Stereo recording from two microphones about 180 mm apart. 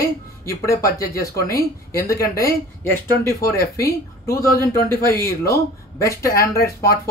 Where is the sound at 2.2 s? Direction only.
55° left (ahead or behind).